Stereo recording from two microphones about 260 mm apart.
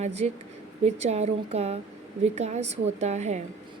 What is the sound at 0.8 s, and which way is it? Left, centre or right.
Speech, right.